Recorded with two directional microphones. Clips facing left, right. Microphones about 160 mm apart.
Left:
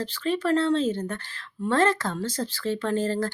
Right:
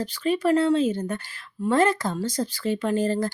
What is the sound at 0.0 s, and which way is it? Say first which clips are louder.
Speech: right 3 dB; 15° right (ahead or behind).